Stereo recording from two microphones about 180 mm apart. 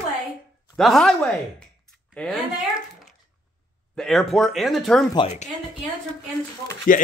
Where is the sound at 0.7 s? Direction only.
Centre (ahead or behind).